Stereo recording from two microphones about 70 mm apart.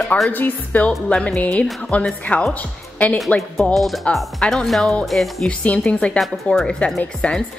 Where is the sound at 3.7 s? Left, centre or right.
Centre.